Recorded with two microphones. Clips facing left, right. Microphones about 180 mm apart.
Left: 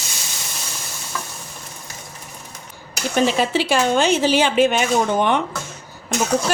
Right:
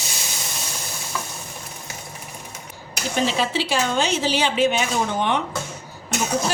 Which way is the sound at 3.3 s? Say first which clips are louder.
Left 4 dB; 55° left (ahead or behind).